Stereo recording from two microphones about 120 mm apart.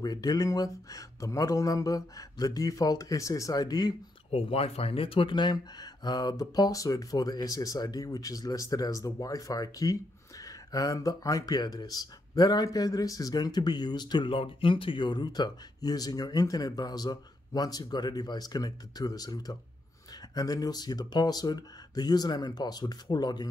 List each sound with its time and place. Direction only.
0.0 s speech: 35° left (ahead or behind)
4.3 s speech: 55° left (ahead or behind); by 23.5 s 35° left (ahead or behind)